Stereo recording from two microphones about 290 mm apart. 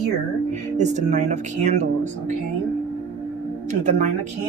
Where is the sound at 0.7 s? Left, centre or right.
Right.